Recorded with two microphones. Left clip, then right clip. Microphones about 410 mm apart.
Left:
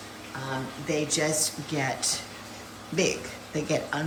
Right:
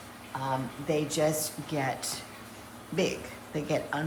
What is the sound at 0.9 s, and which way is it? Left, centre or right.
Speech, centre.